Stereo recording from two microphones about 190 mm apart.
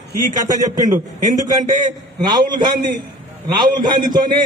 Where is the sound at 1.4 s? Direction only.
20° right (ahead or behind).